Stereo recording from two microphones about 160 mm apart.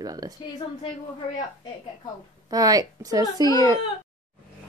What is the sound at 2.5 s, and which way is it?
Speech, 25° right (ahead or behind).